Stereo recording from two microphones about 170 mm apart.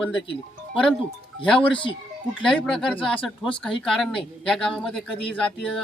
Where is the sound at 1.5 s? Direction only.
30° left (ahead or behind).